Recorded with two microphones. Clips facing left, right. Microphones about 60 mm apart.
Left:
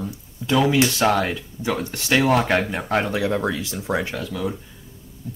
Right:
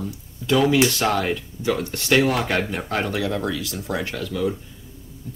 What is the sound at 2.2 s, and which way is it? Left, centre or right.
Speech, left.